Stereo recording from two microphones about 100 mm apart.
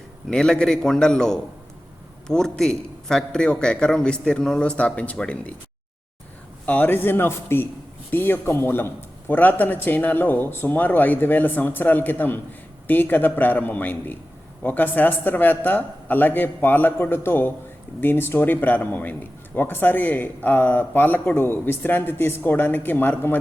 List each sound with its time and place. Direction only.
0.3 s a man's voice: 5° left (ahead or behind)
6.7 s a man's voice: 20° left (ahead or behind)